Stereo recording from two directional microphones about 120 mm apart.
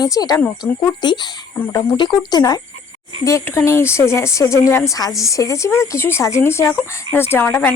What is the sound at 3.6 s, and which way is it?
Speech, 20° left (ahead or behind).